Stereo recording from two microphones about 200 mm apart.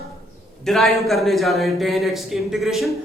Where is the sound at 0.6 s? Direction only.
Centre (ahead or behind).